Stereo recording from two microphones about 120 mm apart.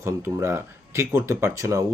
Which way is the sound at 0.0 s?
20° right (ahead or behind).